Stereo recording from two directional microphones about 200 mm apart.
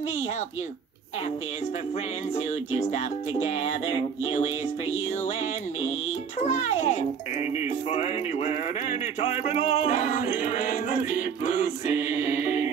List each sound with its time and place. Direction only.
2.3 s music: 35° left (ahead or behind)
6.4 s music: 35° left (ahead or behind)